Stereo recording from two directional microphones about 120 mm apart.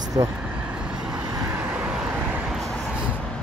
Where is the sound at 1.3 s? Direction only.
30° right (ahead or behind).